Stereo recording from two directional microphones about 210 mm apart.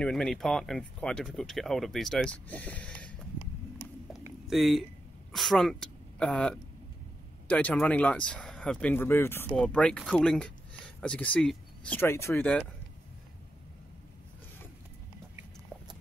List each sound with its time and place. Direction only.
0.0 s speech: 5° left (ahead or behind)
4.5 s a woman's voice: centre (ahead or behind)